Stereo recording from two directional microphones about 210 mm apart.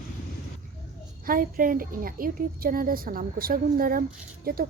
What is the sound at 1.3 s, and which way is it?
Speech, 40° right (ahead or behind).